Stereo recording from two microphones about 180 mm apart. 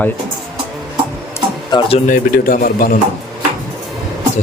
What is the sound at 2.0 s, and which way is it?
Speech, 50° left (ahead or behind).